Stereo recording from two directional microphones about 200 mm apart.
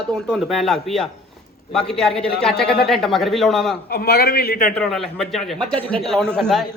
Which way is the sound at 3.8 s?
50° left (ahead or behind).